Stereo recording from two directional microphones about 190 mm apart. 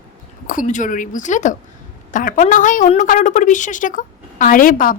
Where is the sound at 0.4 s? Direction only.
45° left (ahead or behind).